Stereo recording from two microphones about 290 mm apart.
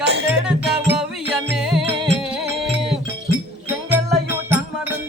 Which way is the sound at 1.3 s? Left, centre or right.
Centre.